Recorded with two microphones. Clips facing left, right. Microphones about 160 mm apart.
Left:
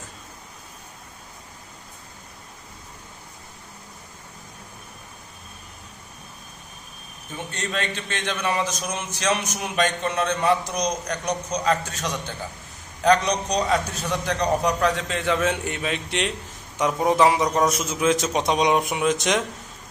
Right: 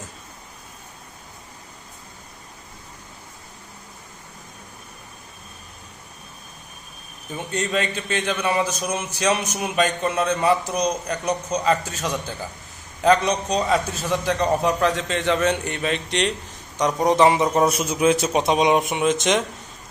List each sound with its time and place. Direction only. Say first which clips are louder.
7.5 s a man's voice: right 5 dB; 10° right (ahead or behind)